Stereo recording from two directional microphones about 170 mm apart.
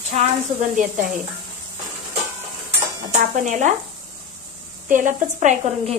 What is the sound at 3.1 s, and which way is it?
Speech, 45° right (ahead or behind).